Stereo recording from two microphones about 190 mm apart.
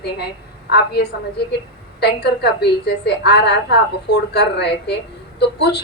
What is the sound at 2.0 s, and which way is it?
A woman's voice, 60° left (ahead or behind).